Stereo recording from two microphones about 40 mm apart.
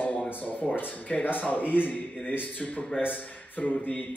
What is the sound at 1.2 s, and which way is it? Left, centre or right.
A man's voice, left.